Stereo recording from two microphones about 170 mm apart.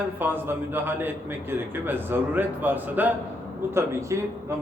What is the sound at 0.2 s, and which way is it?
Speech, 10° right (ahead or behind).